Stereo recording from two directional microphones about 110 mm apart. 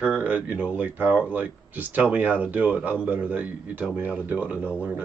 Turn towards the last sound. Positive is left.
turn(degrees=-15)  # may be behind; listen again after turning